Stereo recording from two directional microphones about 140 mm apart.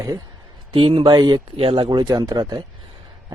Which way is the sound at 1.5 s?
40° right (ahead or behind).